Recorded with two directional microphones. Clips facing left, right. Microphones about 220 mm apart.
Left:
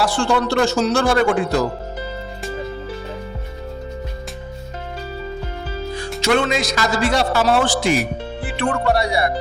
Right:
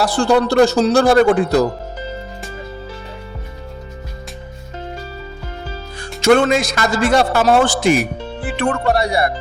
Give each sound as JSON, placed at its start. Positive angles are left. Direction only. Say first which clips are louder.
{"t": 0.0, "sound": "speech", "louder": "right 4 dB", "side_deg": -35}
{"t": 6.2, "sound": "a man's voice", "louder": "right 6 dB", "side_deg": -50}